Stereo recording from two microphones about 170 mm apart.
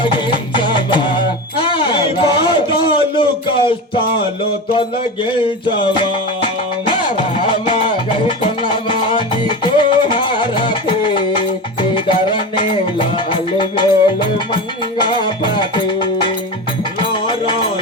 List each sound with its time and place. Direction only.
0.0 s music: 30° left (ahead or behind)
5.6 s music: 30° left (ahead or behind)